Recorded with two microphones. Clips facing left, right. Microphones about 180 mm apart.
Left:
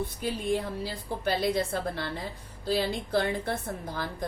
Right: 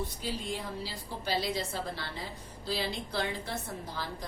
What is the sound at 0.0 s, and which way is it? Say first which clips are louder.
A woman's voice: left 5 dB; 55° left (ahead or behind).